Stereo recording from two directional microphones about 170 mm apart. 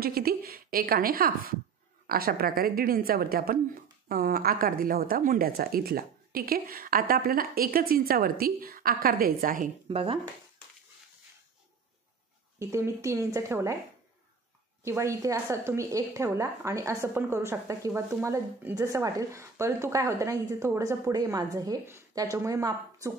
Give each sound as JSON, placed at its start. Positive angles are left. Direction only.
{"t": 0.0, "sound": "a woman's voice", "side_deg": -65}
{"t": 9.8, "sound": "speech", "side_deg": -35}
{"t": 12.5, "sound": "a woman's voice", "side_deg": -15}
{"t": 14.8, "sound": "a woman's voice", "side_deg": -15}